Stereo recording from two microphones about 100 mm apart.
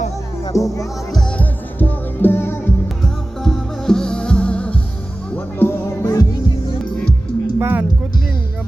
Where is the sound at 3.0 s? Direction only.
5° left (ahead or behind).